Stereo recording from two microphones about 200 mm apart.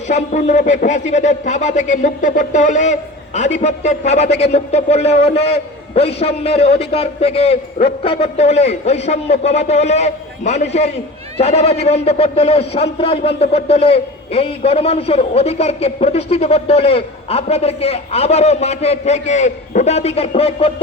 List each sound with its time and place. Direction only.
0.1 s speech: 35° left (ahead or behind)